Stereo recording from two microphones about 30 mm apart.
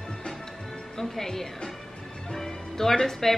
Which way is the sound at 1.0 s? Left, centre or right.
Centre.